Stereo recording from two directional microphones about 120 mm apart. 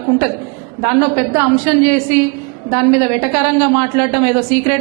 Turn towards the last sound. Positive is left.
turn(degrees=-15)  # may be behind; listen again after turning